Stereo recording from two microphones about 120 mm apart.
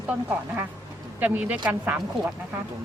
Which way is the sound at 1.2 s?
15° right (ahead or behind).